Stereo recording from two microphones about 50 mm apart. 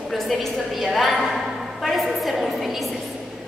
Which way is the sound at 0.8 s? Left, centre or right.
Centre.